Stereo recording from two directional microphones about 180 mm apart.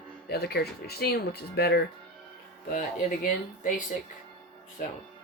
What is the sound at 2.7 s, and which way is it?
Speech, 45° left (ahead or behind).